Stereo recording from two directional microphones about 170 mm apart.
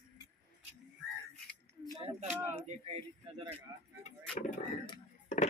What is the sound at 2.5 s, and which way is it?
Speech, 35° right (ahead or behind).